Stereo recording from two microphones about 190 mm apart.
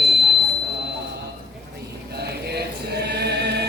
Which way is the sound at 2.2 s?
60° right (ahead or behind).